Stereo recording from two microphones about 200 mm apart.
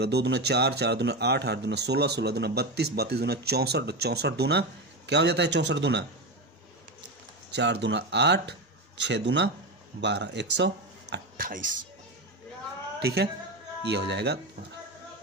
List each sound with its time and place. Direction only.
0.0 s speech: 55° right (ahead or behind)
7.5 s speech: 60° right (ahead or behind)
11.1 s speech: 45° right (ahead or behind)
13.0 s a man's voice: 55° right (ahead or behind)